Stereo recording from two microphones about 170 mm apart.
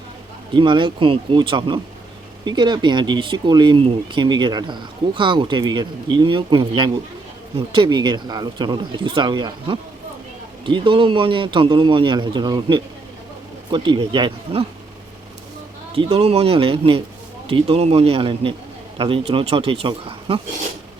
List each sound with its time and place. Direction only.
0.5 s speech: 30° right (ahead or behind)
16.0 s speech: 35° right (ahead or behind)